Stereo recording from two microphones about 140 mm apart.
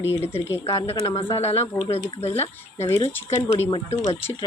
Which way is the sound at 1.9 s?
45° left (ahead or behind).